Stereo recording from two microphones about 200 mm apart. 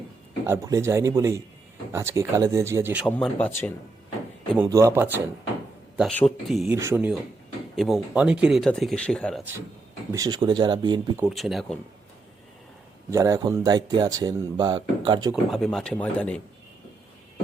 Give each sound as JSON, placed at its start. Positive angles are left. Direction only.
{"t": 0.4, "sound": "speech", "side_deg": -15}
{"t": 3.1, "sound": "speech", "side_deg": 5}
{"t": 4.5, "sound": "speech", "side_deg": -15}
{"t": 6.0, "sound": "speech", "side_deg": 5}
{"t": 6.7, "sound": "speech", "side_deg": -10}
{"t": 10.1, "sound": "speech", "side_deg": -20}
{"t": 11.2, "sound": "speech", "side_deg": 0}
{"t": 13.1, "sound": "speech", "side_deg": -15}
{"t": 15.5, "sound": "speech", "side_deg": 0}